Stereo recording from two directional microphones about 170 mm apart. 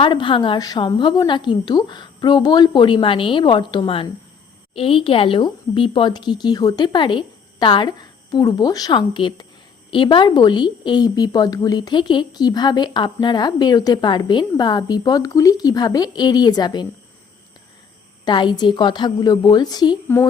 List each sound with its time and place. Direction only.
0.0 s a woman's voice: 30° left (ahead or behind)
18.3 s a woman's voice: 30° left (ahead or behind)